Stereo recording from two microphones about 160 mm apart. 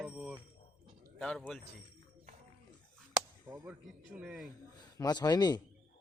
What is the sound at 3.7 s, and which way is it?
Speech, 5° right (ahead or behind).